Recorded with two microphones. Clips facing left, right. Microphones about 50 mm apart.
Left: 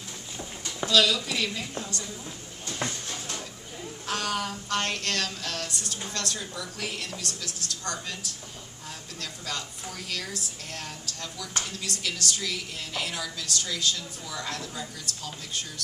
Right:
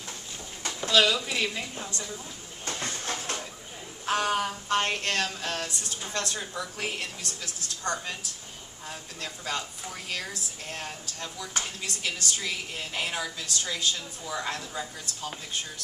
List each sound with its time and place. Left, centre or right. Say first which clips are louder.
0.8 s a woman's voice: even; right
2.9 s a sound: right 3 dB; right
4.0 s a woman's voice: right 4 dB; right